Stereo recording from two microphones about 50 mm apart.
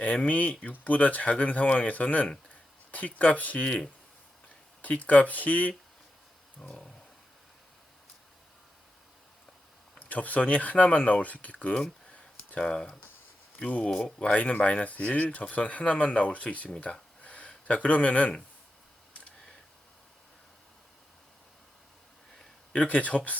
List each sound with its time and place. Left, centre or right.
0.0 s speech: left
4.8 s speech: left
6.6 s speech: centre
10.0 s speech: left
12.1 s a sound: left
13.7 s speech: left
16.8 s a sound: left
17.7 s speech: left
22.7 s speech: left